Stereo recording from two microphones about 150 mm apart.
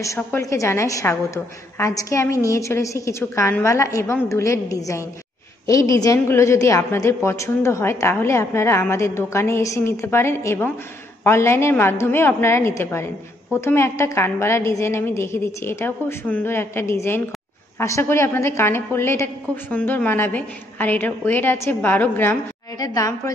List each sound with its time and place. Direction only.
0.0 s a woman's voice: 20° left (ahead or behind)